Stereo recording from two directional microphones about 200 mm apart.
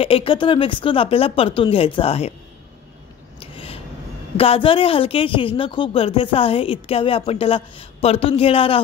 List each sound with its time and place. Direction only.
0.0 s a woman's voice: 30° left (ahead or behind)
3.3 s a sound: 25° left (ahead or behind)
4.4 s a woman's voice: 25° left (ahead or behind)